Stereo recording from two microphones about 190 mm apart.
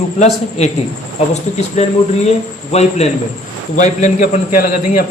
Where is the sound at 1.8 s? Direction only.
35° left (ahead or behind).